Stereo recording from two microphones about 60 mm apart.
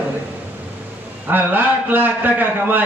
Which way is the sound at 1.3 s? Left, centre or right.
Right.